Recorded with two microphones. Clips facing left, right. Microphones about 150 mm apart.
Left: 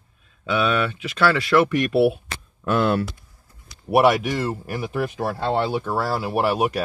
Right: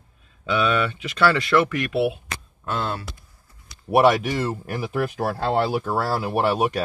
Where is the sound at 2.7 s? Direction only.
65° left (ahead or behind).